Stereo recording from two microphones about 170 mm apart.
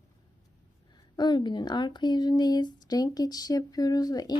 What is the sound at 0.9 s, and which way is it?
A woman's voice, 25° left (ahead or behind).